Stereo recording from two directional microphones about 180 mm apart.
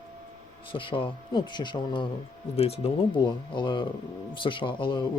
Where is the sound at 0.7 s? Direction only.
30° left (ahead or behind).